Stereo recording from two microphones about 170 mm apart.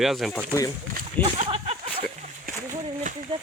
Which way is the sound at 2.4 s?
50° right (ahead or behind).